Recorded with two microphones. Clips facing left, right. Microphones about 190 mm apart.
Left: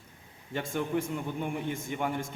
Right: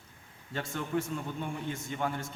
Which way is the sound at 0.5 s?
15° left (ahead or behind).